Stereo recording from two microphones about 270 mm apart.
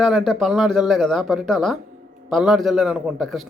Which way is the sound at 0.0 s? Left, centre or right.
Centre.